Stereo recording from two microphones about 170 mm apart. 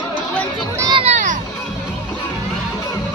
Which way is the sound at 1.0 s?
45° right (ahead or behind).